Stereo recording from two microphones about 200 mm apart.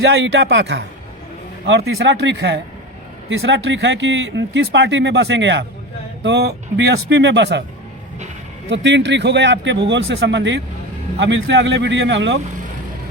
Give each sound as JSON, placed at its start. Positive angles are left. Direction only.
{"t": 0.0, "sound": "speech", "side_deg": -65}
{"t": 8.7, "sound": "speech", "side_deg": -60}